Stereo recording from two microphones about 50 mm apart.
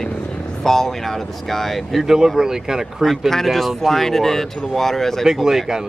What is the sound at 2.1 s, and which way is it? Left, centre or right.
Speech, centre.